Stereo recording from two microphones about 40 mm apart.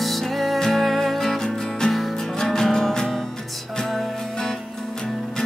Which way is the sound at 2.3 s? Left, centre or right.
Centre.